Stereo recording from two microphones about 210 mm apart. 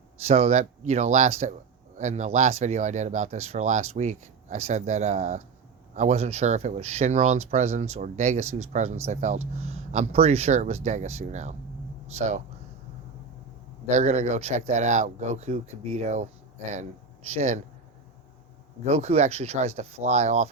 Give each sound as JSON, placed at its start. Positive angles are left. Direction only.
{"t": 0.2, "sound": "speech", "side_deg": -30}
{"t": 13.8, "sound": "speech", "side_deg": -30}
{"t": 17.3, "sound": "speech", "side_deg": -30}
{"t": 18.9, "sound": "speech", "side_deg": -30}